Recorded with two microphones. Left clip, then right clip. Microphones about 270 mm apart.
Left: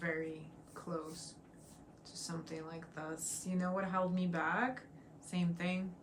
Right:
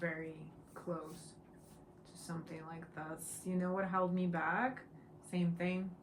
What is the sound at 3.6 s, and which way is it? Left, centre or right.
Speech, centre.